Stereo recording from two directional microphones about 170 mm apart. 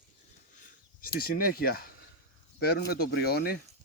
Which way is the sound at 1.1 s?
60° left (ahead or behind).